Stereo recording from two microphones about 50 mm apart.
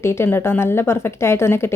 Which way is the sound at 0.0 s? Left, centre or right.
Left.